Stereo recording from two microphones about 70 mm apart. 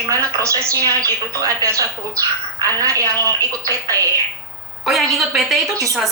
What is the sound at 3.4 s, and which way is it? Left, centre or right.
Speech, right.